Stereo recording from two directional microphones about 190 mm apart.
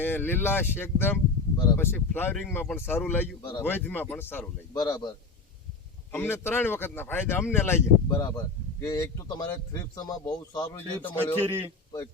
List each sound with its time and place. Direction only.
0.0 s speech: 10° left (ahead or behind)
3.4 s a man's voice: 20° left (ahead or behind)
3.7 s a man's voice: 10° left (ahead or behind)